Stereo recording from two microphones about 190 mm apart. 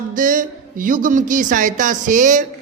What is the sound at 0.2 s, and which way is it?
A man's voice, 45° right (ahead or behind).